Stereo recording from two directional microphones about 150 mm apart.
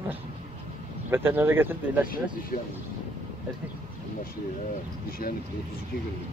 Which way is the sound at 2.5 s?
65° left (ahead or behind).